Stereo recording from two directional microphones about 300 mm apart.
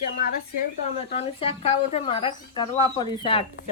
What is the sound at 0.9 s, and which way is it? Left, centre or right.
Speech, left.